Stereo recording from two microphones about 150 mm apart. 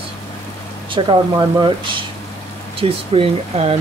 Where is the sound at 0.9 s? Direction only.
30° right (ahead or behind).